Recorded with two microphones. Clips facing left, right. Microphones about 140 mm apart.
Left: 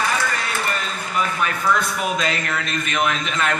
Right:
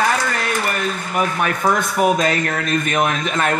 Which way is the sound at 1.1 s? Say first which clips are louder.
Right 2 dB; 50° right (ahead or behind).